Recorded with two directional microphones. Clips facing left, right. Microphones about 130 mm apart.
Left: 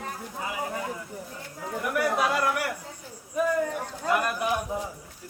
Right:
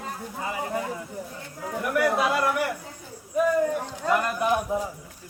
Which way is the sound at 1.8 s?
Centre (ahead or behind).